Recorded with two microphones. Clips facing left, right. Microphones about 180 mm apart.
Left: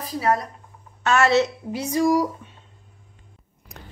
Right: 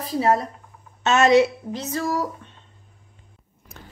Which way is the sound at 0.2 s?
25° right (ahead or behind).